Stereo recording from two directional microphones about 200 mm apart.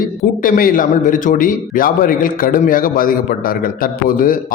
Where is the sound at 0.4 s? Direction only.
45° left (ahead or behind).